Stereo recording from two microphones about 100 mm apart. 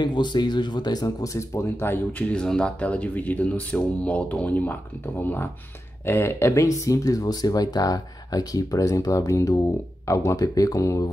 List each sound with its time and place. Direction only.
0.0 s speech: 50° left (ahead or behind); by 2.0 s 25° left (ahead or behind)
2.1 s speech: 10° left (ahead or behind); by 11.1 s 35° left (ahead or behind)